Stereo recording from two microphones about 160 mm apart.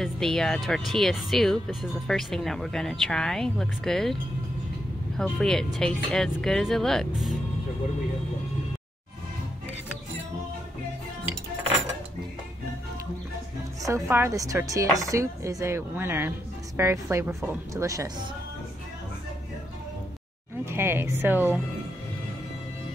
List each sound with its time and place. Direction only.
0.0 s speech: centre (ahead or behind)
13.8 s speech: 15° right (ahead or behind)
20.6 s speech: 15° right (ahead or behind)